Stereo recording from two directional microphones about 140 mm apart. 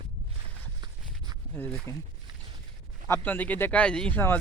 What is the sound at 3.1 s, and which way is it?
Speech, 15° left (ahead or behind).